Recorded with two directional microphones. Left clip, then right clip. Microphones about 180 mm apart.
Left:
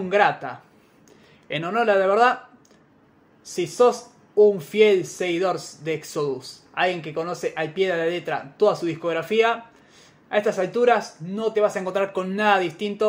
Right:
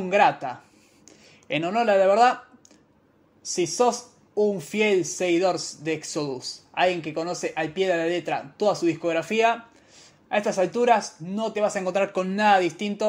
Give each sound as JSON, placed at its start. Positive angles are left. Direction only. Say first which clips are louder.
{"t": 0.1, "sound": "speech", "louder": "even", "side_deg": -30}
{"t": 3.4, "sound": "speech", "louder": "left 3 dB", "side_deg": -25}